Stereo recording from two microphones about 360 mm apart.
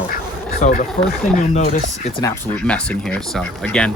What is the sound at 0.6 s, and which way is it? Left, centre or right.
Speech, left.